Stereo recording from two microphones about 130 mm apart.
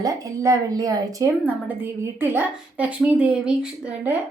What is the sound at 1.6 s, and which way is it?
A woman's voice, 15° right (ahead or behind).